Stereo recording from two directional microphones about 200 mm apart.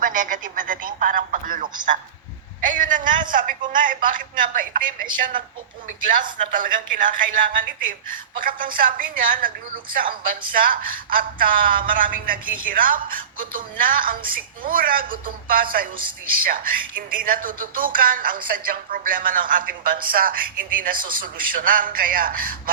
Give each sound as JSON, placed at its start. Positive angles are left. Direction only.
{"t": 0.0, "sound": "speech", "side_deg": -40}
{"t": 6.5, "sound": "speech", "side_deg": -40}
{"t": 10.6, "sound": "speech", "side_deg": -45}